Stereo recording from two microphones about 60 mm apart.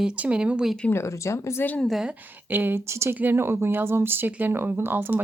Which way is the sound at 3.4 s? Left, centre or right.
Right.